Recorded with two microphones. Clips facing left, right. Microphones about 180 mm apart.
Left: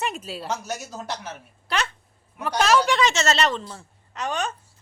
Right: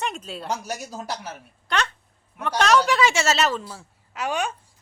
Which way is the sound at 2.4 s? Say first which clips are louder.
Even; centre (ahead or behind).